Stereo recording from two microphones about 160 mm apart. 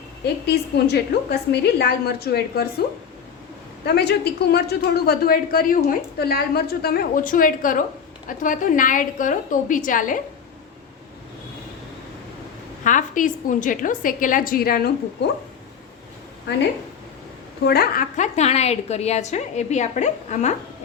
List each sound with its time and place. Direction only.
0.4 s a woman's voice: 90° left
3.8 s a woman's voice: 90° left; by 10.2 s 55° left (ahead or behind)
12.8 s a woman's voice: 55° left (ahead or behind)
17.7 s a woman's voice: 65° left (ahead or behind); by 20.6 s 45° left (ahead or behind)